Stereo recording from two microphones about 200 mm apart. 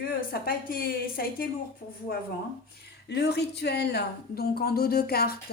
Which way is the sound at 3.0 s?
60° left (ahead or behind).